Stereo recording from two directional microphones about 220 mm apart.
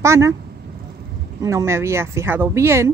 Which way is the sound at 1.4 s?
15° right (ahead or behind).